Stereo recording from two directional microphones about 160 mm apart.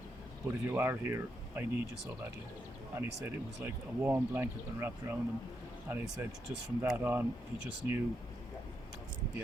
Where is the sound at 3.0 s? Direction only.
15° right (ahead or behind).